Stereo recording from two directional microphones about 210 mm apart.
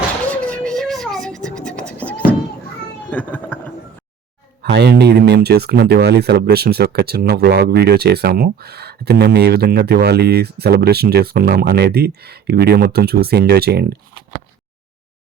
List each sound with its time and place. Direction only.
0.3 s scratch: 5° left (ahead or behind)
3.1 s a sound: 10° left (ahead or behind)
4.6 s speech: 50° right (ahead or behind)